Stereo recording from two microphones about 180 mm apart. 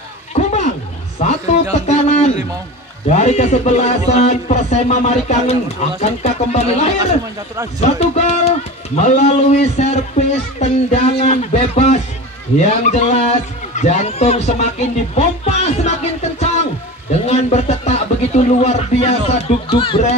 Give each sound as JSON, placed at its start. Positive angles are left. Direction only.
{"t": 0.3, "sound": "a sound", "side_deg": 40}
{"t": 3.1, "sound": "a man's voice", "side_deg": 40}
{"t": 17.1, "sound": "a man's voice", "side_deg": 35}